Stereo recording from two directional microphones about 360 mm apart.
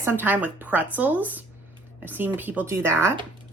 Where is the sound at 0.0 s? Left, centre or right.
Centre.